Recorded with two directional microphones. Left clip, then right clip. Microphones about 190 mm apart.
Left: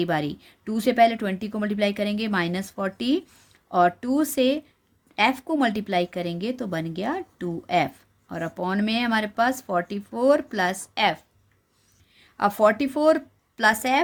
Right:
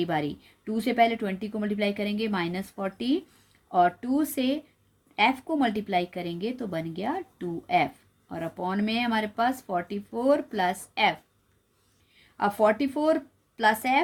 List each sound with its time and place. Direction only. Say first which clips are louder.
0.0 s speech: left 3 dB; 30° left (ahead or behind)